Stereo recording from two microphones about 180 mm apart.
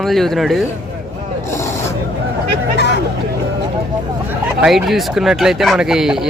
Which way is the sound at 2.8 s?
70° left (ahead or behind).